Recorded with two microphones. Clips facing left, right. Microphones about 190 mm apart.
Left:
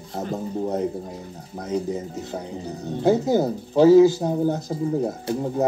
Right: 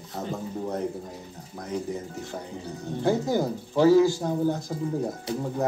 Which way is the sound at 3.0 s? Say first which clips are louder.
Left 5 dB; 15° left (ahead or behind).